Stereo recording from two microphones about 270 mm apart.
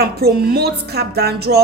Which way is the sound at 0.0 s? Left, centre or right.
Right.